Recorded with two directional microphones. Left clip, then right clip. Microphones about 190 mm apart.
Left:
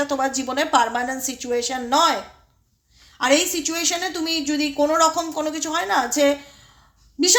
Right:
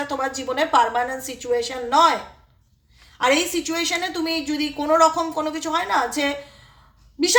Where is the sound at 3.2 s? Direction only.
35° left (ahead or behind).